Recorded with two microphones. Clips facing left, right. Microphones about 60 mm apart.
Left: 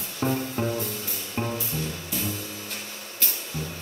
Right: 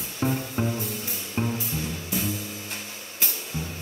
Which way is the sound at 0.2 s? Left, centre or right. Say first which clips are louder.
Even; centre.